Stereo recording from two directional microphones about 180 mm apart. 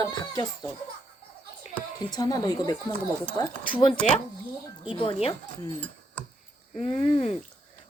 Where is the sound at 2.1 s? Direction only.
20° left (ahead or behind).